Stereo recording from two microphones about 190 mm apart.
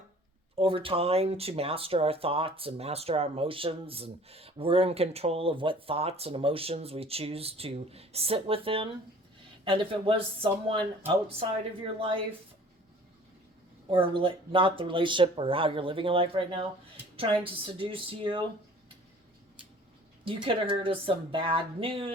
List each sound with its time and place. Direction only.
0.5 s speech: 30° right (ahead or behind)
13.9 s speech: 25° right (ahead or behind)
20.2 s speech: 25° right (ahead or behind)